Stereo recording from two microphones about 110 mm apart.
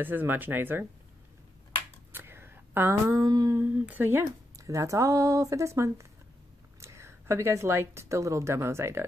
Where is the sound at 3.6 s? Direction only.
15° right (ahead or behind).